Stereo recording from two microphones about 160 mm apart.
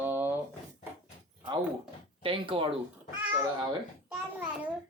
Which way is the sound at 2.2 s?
35° right (ahead or behind).